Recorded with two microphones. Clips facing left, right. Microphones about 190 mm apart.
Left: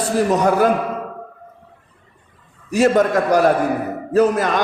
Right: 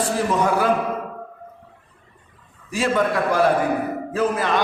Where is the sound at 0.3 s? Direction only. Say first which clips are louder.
Left 5 dB; 40° left (ahead or behind).